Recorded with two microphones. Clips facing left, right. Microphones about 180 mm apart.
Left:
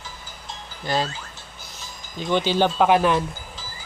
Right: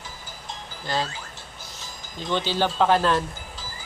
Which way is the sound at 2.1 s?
15° left (ahead or behind).